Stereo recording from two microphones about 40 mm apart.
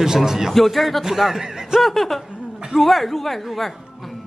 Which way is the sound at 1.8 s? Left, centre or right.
Centre.